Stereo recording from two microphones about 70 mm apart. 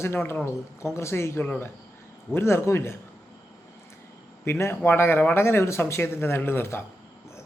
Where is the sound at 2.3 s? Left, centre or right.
Left.